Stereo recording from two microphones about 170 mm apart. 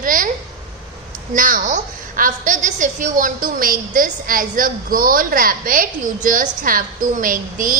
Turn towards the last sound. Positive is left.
turn(degrees=-55)  # may be behind; listen again after turning